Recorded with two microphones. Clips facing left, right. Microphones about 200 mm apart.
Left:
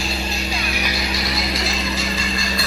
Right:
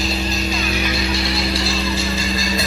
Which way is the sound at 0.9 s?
30° right (ahead or behind).